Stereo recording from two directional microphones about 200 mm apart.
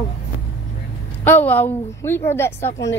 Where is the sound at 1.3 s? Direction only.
10° left (ahead or behind).